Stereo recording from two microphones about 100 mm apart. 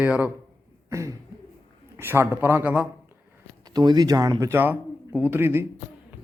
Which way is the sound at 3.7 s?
45° right (ahead or behind).